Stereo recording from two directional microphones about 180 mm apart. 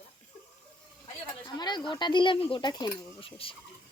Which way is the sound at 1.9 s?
25° left (ahead or behind).